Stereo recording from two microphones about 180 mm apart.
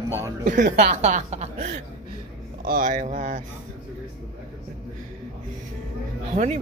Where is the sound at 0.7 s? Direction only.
40° right (ahead or behind).